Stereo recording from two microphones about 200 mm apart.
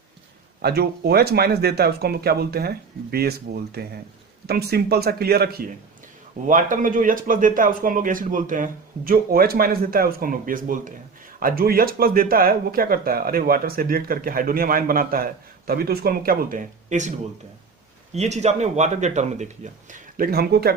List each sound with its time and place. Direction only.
0.6 s speech: 50° right (ahead or behind)